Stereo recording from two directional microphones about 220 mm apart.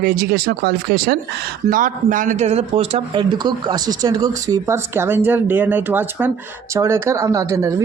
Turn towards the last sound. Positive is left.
turn(degrees=-15)  # may be behind; listen again after turning